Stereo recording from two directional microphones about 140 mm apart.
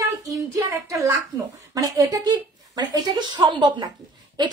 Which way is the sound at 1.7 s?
25° right (ahead or behind).